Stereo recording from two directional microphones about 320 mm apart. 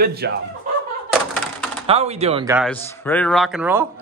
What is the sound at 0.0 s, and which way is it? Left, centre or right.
Speech, right.